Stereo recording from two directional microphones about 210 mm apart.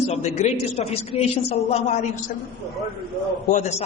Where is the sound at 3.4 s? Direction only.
35° left (ahead or behind).